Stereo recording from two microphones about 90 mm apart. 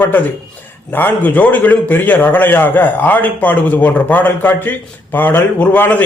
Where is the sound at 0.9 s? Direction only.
20° left (ahead or behind).